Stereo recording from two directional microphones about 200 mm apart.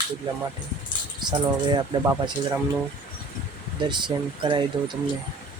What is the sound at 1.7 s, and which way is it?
Speech, 10° right (ahead or behind).